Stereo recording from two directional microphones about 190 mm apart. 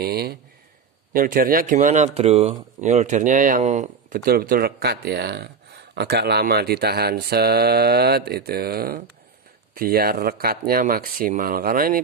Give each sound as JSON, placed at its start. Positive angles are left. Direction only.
{"t": 0.0, "sound": "speech", "side_deg": -55}